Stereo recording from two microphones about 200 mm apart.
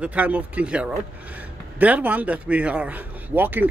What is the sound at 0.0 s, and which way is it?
Speech, 5° right (ahead or behind).